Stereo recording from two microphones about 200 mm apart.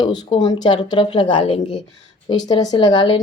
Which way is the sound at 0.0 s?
20° left (ahead or behind).